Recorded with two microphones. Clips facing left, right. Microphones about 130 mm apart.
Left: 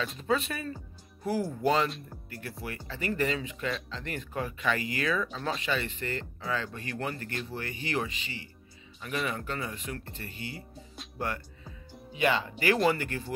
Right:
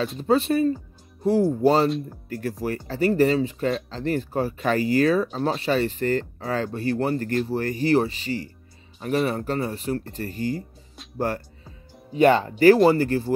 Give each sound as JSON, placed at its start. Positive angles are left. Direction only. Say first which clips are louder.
{"t": 0.2, "sound": "speech", "louder": "right 12 dB", "side_deg": -35}